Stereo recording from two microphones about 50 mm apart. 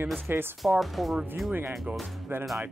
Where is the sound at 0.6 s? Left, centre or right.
Centre.